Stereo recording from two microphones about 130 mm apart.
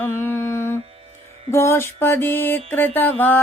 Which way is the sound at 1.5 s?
20° left (ahead or behind).